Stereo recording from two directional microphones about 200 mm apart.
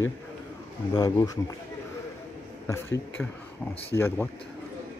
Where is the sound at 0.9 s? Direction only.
20° left (ahead or behind).